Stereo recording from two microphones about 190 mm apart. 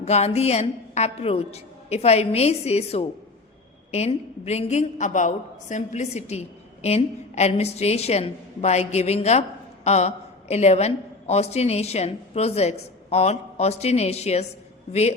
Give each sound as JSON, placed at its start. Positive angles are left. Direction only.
{"t": 0.0, "sound": "a woman's voice", "side_deg": 35}